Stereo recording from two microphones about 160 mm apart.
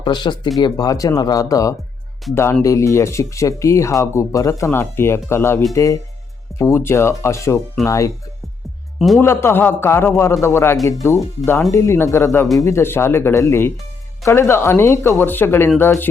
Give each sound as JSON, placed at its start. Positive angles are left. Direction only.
{"t": 0.0, "sound": "speech", "side_deg": 30}
{"t": 9.0, "sound": "a man's voice", "side_deg": 0}
{"t": 9.2, "sound": "speech", "side_deg": 15}